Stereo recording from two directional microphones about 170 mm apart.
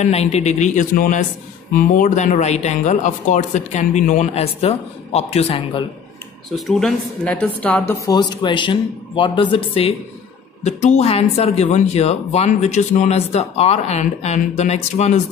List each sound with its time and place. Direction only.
0.0 s speech: 40° left (ahead or behind)
6.5 s speech: centre (ahead or behind)
8.1 s speech: 25° left (ahead or behind)
10.6 s speech: 40° left (ahead or behind)